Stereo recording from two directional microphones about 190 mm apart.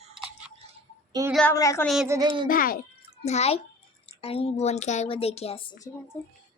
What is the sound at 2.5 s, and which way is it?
Speech, 50° left (ahead or behind).